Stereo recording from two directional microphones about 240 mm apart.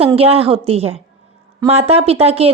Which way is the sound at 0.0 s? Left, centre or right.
Right.